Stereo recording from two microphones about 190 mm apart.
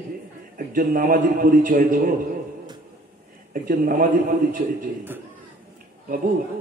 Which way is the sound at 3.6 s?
45° right (ahead or behind).